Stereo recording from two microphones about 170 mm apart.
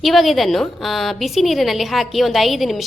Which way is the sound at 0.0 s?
Centre (ahead or behind).